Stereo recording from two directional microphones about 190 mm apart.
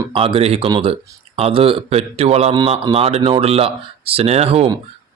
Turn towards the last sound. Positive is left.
turn(degrees=-30)  # may be behind; listen again after turning